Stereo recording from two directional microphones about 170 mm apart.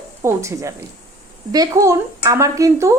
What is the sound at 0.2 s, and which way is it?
A woman's voice, 15° right (ahead or behind).